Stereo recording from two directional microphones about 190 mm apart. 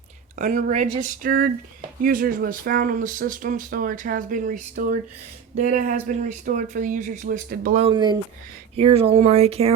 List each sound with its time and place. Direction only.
0.3 s speech: 40° right (ahead or behind)
7.8 s speech: 25° right (ahead or behind)